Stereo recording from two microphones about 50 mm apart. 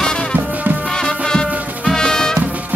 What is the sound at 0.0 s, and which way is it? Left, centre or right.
Music, centre.